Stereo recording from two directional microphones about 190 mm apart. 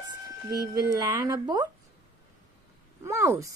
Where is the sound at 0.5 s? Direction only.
20° right (ahead or behind).